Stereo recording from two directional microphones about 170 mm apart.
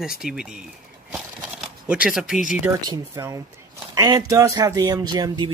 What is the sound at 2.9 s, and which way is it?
Speech, 20° right (ahead or behind).